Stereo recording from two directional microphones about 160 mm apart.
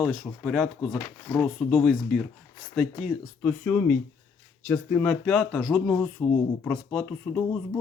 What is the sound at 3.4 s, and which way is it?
Speech, 10° left (ahead or behind).